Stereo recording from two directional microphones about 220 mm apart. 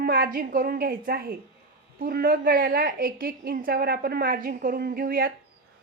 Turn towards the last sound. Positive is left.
turn(degrees=-40)  # may be behind; listen again after turning